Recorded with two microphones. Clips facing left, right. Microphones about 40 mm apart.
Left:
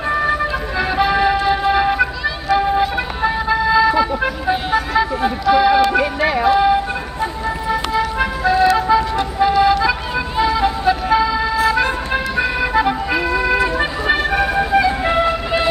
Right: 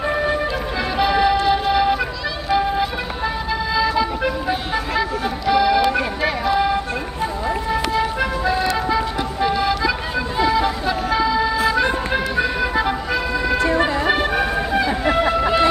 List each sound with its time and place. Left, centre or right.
0.7 s music: centre
2.5 s vehicle: centre
6.5 s music: centre
8.2 s music: centre
8.7 s vehicle: centre
9.6 s music: centre
15.0 s music: centre